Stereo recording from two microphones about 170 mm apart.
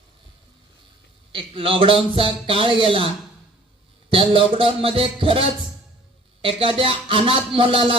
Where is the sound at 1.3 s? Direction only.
30° right (ahead or behind).